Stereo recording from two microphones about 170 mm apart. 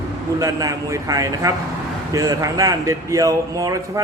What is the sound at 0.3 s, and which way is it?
Speech, 20° right (ahead or behind).